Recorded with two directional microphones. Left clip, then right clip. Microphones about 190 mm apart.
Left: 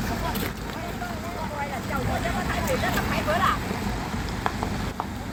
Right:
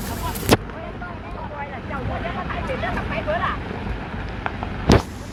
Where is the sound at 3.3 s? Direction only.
90° left.